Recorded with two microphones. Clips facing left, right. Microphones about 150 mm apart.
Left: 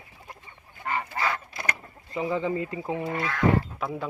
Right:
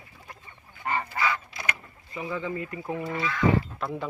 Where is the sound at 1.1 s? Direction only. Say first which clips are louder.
Even; 40° left (ahead or behind).